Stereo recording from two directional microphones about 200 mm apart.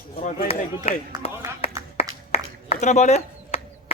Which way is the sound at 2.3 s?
35° left (ahead or behind).